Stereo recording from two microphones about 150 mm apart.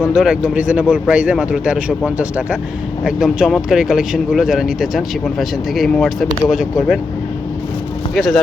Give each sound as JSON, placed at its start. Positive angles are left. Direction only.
{"t": 0.1, "sound": "speech", "side_deg": -5}
{"t": 8.1, "sound": "speech", "side_deg": 0}